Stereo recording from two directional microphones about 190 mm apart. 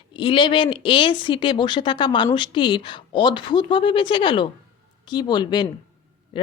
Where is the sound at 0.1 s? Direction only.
25° left (ahead or behind).